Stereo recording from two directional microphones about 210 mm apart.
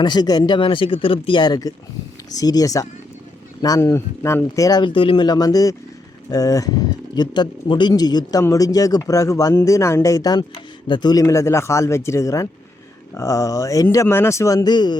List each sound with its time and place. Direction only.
0.0 s speech: 20° left (ahead or behind)